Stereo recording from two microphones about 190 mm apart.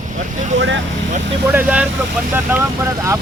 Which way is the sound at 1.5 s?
10° right (ahead or behind).